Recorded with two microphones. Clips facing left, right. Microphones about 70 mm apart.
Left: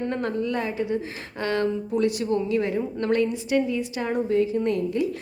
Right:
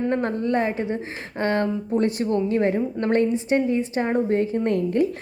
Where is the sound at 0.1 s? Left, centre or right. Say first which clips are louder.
Right 4 dB; right.